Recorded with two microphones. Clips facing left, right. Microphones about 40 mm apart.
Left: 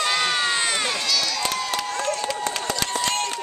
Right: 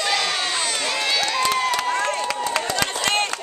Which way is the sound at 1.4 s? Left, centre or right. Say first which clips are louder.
Right 5 dB; right.